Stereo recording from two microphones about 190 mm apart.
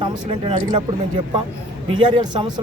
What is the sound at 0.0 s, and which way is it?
Speech, 25° right (ahead or behind).